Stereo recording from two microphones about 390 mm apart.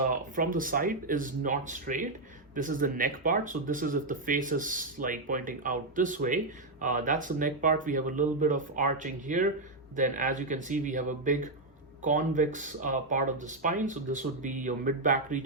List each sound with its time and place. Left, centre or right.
0.0 s speech: right